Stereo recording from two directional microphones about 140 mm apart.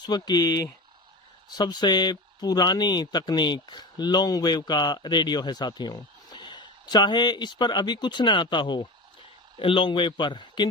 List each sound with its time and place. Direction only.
0.0 s speech: 30° left (ahead or behind)